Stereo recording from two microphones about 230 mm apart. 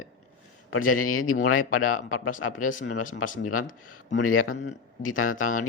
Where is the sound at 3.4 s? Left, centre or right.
Left.